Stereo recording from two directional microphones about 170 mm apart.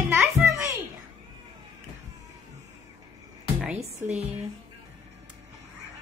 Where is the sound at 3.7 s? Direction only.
40° right (ahead or behind).